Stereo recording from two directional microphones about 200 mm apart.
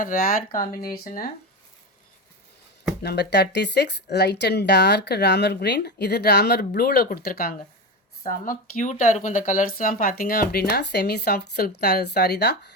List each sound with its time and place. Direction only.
0.0 s speech: 45° left (ahead or behind)
3.0 s speech: 55° left (ahead or behind)
8.2 s speech: 40° left (ahead or behind); by 12.7 s 55° left (ahead or behind)